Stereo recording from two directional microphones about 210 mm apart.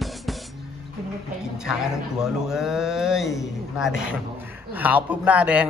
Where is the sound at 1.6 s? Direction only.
5° right (ahead or behind).